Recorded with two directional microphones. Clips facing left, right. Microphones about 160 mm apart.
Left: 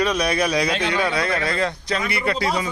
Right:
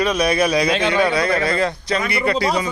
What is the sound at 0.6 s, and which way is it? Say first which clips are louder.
Speech: right 4 dB; 85° right.